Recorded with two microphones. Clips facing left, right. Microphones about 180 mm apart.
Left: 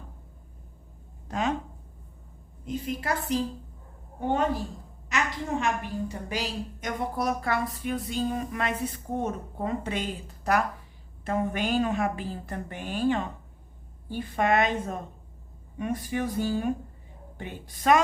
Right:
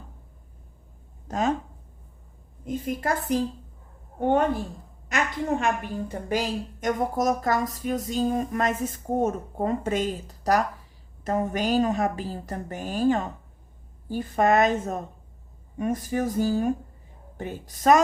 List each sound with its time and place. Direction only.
1.3 s a woman's voice: 40° right (ahead or behind)
2.6 s a woman's voice: 50° right (ahead or behind)